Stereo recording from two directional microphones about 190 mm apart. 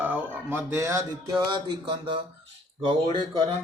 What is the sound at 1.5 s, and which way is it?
Speech, 25° right (ahead or behind).